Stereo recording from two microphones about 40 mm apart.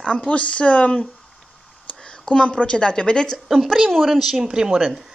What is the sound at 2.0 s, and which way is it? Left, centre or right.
A woman's voice, left.